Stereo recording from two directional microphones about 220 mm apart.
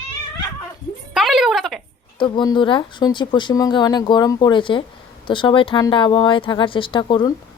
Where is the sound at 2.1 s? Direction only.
20° left (ahead or behind).